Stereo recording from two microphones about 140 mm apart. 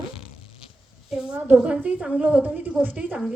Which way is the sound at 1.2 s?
10° right (ahead or behind).